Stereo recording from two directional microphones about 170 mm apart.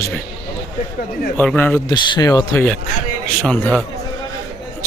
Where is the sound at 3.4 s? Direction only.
5° left (ahead or behind).